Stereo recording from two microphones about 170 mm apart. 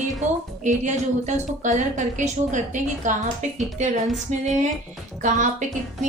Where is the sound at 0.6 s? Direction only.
45° right (ahead or behind).